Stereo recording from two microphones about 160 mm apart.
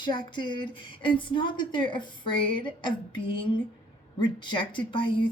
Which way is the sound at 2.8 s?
35° left (ahead or behind).